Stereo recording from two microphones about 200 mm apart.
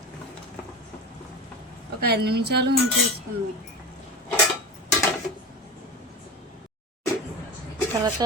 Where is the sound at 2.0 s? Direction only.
50° right (ahead or behind).